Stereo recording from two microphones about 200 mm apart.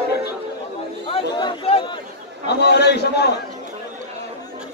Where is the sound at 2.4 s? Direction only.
55° left (ahead or behind).